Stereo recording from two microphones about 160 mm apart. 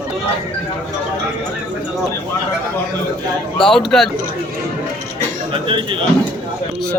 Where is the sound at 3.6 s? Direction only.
5° left (ahead or behind).